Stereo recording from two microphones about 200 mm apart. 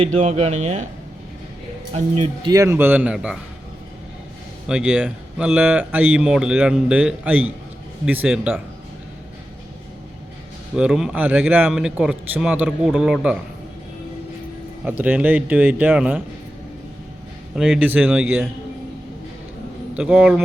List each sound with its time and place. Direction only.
0.0 s speech: 30° right (ahead or behind)
1.9 s speech: 35° right (ahead or behind)
2.5 s a man's voice: 15° right (ahead or behind)
4.6 s a man's voice: 5° right (ahead or behind)
10.8 s speech: 5° right (ahead or behind)
14.8 s a man's voice: 10° right (ahead or behind)
17.5 s a man's voice: 5° right (ahead or behind)
19.9 s speech: 5° right (ahead or behind)